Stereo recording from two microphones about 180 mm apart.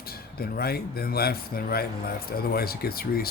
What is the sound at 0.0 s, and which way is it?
Speech, 55° left (ahead or behind).